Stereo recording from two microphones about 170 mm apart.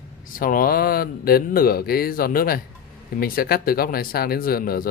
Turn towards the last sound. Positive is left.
turn(degrees=60)  # may be behind; listen again after turning